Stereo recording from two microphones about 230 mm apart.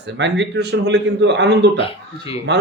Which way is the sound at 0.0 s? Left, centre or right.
Right.